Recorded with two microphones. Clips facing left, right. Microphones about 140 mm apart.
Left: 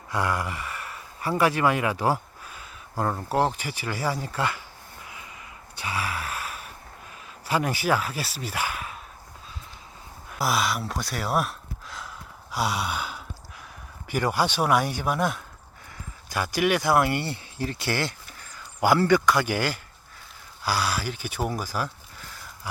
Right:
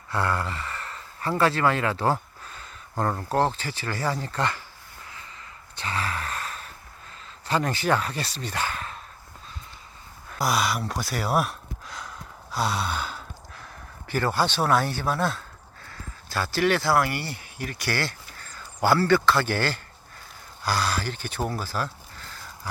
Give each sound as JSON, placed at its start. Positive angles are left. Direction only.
{"t": 0.1, "sound": "speech", "side_deg": 15}
{"t": 5.7, "sound": "gasp", "side_deg": 10}
{"t": 7.4, "sound": "speech", "side_deg": 10}
{"t": 10.3, "sound": "a sound", "side_deg": 0}
{"t": 14.1, "sound": "speech", "side_deg": 10}